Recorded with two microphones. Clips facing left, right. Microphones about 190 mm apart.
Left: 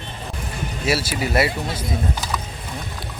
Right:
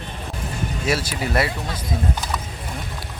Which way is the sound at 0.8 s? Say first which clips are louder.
Left 2 dB; 5° left (ahead or behind).